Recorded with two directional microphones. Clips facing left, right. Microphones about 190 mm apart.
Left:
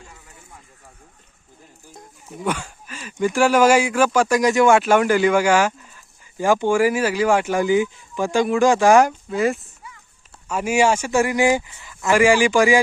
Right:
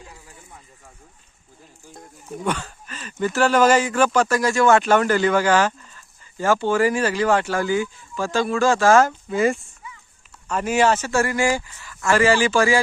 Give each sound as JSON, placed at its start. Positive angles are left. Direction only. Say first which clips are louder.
{"t": 2.4, "sound": "speech", "louder": "left 1 dB", "side_deg": 10}
{"t": 9.3, "sound": "speech", "louder": "right 3 dB", "side_deg": 0}
{"t": 10.5, "sound": "speech", "louder": "left 1 dB", "side_deg": 10}